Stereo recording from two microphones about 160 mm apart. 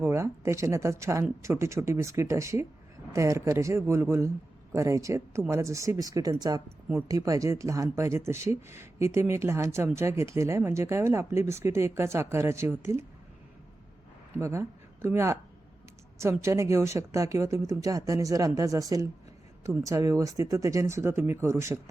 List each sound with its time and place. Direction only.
0.0 s a woman's voice: 15° right (ahead or behind)
14.3 s a woman's voice: 15° right (ahead or behind)